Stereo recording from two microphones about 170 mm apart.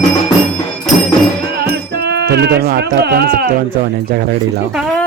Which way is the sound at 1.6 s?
75° right (ahead or behind).